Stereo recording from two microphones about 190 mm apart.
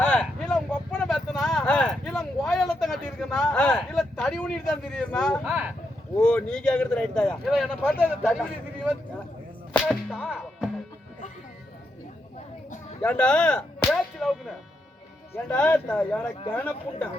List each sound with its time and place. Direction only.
0.0 s a sound: 5° left (ahead or behind)
6.1 s speech: 5° left (ahead or behind)
9.7 s whip: centre (ahead or behind)
13.0 s speech: 5° left (ahead or behind)
13.9 s whip: centre (ahead or behind)
15.4 s speech: 5° left (ahead or behind)